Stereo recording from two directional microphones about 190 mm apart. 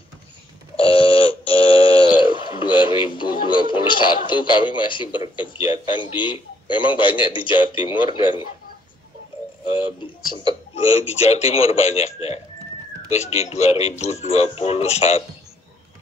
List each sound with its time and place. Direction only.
0.7 s a sound: 30° left (ahead or behind)
5.6 s a man's voice: 30° left (ahead or behind)
10.7 s speech: 30° left (ahead or behind)
13.1 s speech: 35° left (ahead or behind)